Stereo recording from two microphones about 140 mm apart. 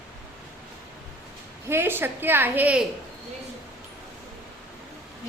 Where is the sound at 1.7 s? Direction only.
15° right (ahead or behind).